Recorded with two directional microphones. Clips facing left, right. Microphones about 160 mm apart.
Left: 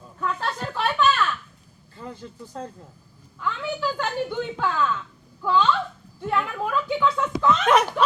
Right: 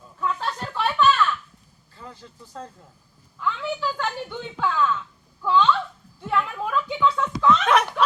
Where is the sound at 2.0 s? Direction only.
10° left (ahead or behind).